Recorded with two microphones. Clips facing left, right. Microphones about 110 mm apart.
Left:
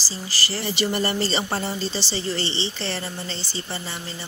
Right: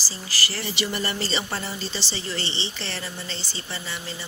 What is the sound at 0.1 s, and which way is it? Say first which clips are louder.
A woman's voice: left 2 dB; 30° left (ahead or behind).